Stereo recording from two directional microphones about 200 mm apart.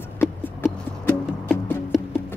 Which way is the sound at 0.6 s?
5° left (ahead or behind).